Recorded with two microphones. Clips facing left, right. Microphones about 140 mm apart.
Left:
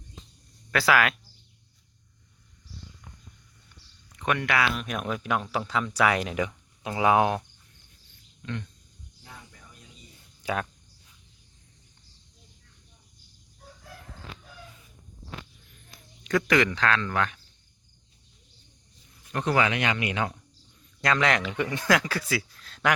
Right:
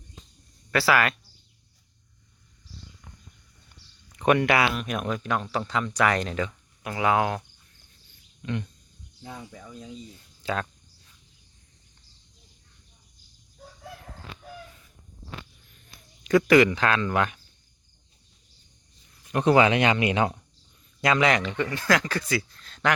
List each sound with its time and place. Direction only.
0.7 s speech: centre (ahead or behind)
4.3 s speech: 15° right (ahead or behind)
4.7 s speech: centre (ahead or behind); by 7.4 s 20° left (ahead or behind)
8.4 s speech: 15° right (ahead or behind)
9.3 s speech: 80° right
10.4 s speech: 10° left (ahead or behind)
16.2 s speech: 5° right (ahead or behind)
19.3 s speech: 20° right (ahead or behind)
21.0 s speech: 5° right (ahead or behind)